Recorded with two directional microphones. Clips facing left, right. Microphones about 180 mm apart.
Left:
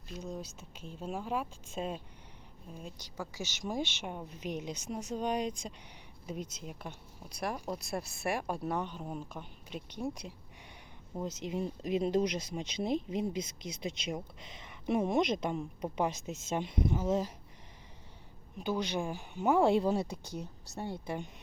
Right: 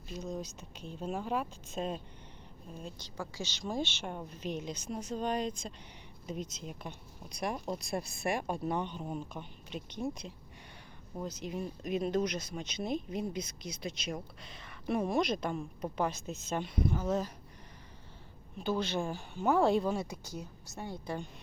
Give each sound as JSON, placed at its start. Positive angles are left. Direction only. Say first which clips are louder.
{"t": 0.2, "sound": "speech", "louder": "right 2 dB", "side_deg": 5}
{"t": 3.3, "sound": "speech", "louder": "even", "side_deg": 15}
{"t": 11.2, "sound": "speech", "louder": "left 2 dB", "side_deg": 25}
{"t": 18.6, "sound": "speech", "louder": "right 1 dB", "side_deg": 15}